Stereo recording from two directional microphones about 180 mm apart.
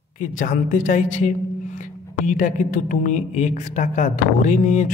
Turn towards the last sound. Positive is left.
turn(degrees=45)  # may be behind; listen again after turning